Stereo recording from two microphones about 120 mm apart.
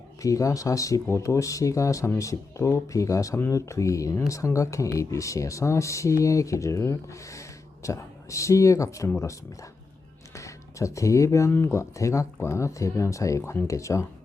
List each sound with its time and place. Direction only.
0.2 s speech: 25° left (ahead or behind)
10.3 s speech: 25° left (ahead or behind)